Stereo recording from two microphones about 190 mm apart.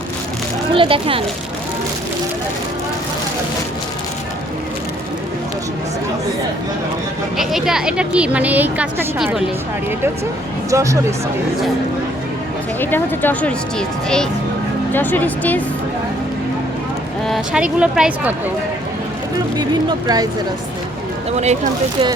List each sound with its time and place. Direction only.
0.7 s speech: 30° right (ahead or behind)
7.3 s a woman's voice: centre (ahead or behind)
10.7 s speech: 15° right (ahead or behind)
12.8 s speech: 10° left (ahead or behind)
17.2 s a woman's voice: centre (ahead or behind)
19.5 s speech: 20° right (ahead or behind)
21.3 s speech: 35° right (ahead or behind)